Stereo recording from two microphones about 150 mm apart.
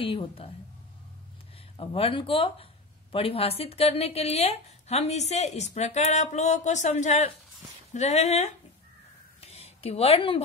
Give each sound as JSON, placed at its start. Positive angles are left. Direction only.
{"t": 0.0, "sound": "a woman's voice", "side_deg": 35}
{"t": 1.8, "sound": "speech", "side_deg": 40}
{"t": 9.4, "sound": "a sound", "side_deg": 45}